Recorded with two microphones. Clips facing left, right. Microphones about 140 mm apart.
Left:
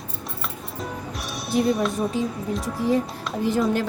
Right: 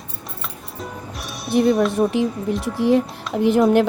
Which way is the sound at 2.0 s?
70° right (ahead or behind).